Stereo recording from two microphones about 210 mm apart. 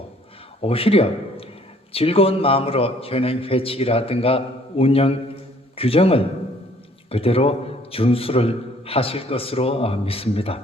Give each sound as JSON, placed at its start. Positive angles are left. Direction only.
{"t": 0.6, "sound": "a man's voice", "side_deg": 25}